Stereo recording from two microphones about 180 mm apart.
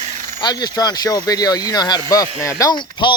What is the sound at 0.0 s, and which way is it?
Vehicle, 40° right (ahead or behind).